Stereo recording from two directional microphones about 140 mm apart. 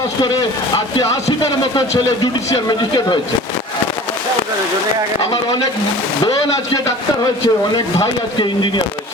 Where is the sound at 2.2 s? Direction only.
30° left (ahead or behind).